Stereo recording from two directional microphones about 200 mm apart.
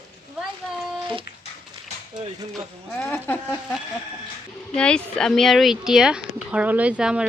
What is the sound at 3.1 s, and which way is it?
Speech, 10° left (ahead or behind).